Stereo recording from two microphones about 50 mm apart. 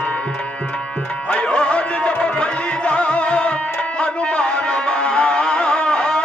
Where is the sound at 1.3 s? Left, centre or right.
Left.